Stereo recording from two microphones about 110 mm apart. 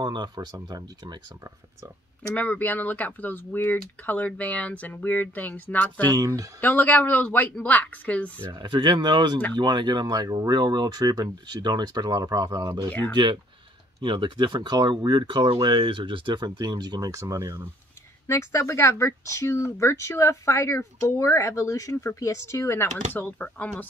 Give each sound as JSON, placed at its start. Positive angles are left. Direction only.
{"t": 0.0, "sound": "speech", "side_deg": -40}
{"t": 2.3, "sound": "speech", "side_deg": 15}
{"t": 6.1, "sound": "speech", "side_deg": -30}
{"t": 6.6, "sound": "speech", "side_deg": 15}
{"t": 8.5, "sound": "speech", "side_deg": -45}
{"t": 13.1, "sound": "speech", "side_deg": -45}
{"t": 18.2, "sound": "speech", "side_deg": 25}